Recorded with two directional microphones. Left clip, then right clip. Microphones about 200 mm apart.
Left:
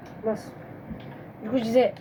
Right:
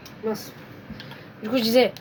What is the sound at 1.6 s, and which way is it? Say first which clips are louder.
Speech: right 3 dB; 45° right (ahead or behind).